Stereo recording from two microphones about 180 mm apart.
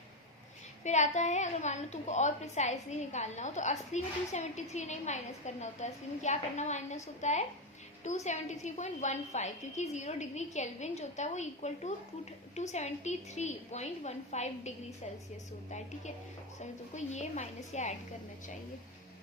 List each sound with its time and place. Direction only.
0.9 s a woman's voice: 40° left (ahead or behind)
16.9 s a woman's voice: 40° left (ahead or behind)